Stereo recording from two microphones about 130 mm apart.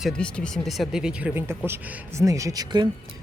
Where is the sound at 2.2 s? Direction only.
25° right (ahead or behind).